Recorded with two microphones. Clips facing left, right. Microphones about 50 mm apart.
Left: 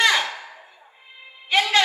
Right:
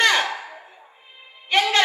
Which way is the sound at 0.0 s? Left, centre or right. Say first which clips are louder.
Right 1 dB; right.